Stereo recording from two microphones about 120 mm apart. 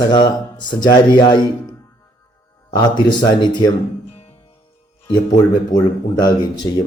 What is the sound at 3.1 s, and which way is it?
Speech, 40° left (ahead or behind).